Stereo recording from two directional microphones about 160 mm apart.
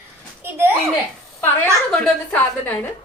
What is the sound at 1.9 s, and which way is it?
Speech, 5° left (ahead or behind).